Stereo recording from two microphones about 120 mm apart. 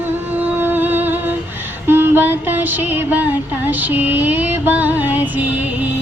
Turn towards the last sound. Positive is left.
turn(degrees=-15)  # may be behind; listen again after turning